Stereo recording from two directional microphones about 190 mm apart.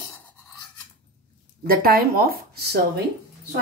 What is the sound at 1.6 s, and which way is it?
Speech, 50° right (ahead or behind).